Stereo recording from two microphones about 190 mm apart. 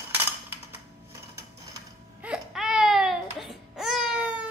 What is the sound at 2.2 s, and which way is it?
Baby cry, 5° right (ahead or behind).